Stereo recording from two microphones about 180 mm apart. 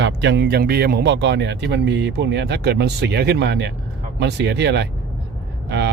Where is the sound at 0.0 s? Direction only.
80° right.